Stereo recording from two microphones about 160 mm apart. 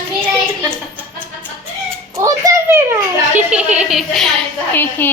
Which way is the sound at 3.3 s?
10° right (ahead or behind).